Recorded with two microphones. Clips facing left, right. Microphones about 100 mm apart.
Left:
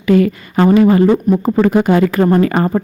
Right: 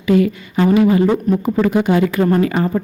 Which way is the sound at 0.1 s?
50° left (ahead or behind).